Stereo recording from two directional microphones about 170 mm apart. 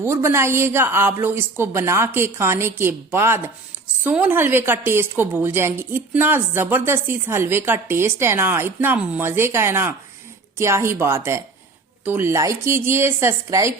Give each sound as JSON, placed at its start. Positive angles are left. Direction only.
{"t": 0.0, "sound": "a woman's voice", "side_deg": -15}